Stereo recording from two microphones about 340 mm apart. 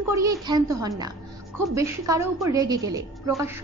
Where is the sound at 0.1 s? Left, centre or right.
Centre.